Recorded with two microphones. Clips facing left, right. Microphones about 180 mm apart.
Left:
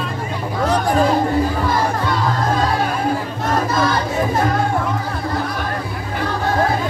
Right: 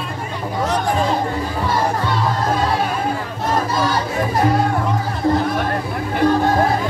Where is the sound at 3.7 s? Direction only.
10° right (ahead or behind).